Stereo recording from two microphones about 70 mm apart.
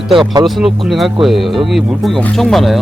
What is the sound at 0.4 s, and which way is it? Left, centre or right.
Speech, centre.